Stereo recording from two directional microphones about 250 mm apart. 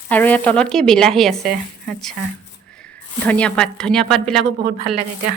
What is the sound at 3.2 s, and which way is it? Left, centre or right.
A woman's voice, centre.